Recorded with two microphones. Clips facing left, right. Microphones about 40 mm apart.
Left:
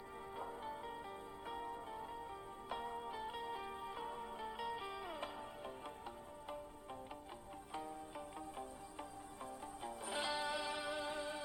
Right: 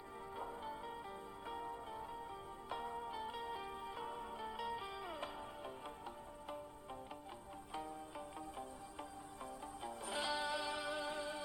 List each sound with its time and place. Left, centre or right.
0.6 s music: centre
3.4 s music: centre
4.8 s music: centre
5.0 s music: centre
10.1 s music: left